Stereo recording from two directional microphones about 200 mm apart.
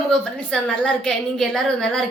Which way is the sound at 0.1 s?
5° left (ahead or behind).